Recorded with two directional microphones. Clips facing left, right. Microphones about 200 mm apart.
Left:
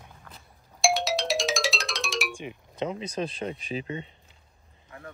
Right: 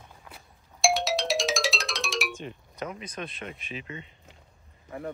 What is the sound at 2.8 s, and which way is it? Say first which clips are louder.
Speech: left 6 dB; 25° left (ahead or behind).